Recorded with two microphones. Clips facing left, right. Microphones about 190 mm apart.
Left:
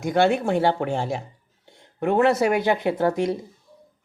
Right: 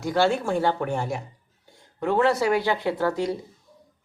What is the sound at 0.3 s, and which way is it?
Speech, 60° left (ahead or behind).